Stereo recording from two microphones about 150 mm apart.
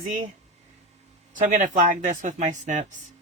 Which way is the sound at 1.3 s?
60° right (ahead or behind).